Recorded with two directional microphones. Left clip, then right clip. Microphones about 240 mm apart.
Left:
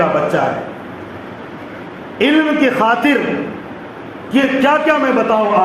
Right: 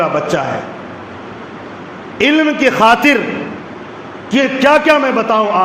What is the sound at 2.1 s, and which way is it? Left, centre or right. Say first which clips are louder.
A man's voice: right 1 dB; right.